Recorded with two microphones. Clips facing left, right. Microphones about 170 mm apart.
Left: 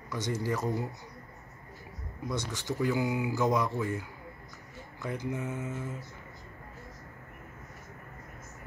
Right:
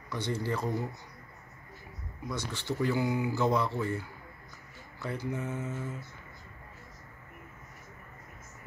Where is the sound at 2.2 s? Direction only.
15° left (ahead or behind).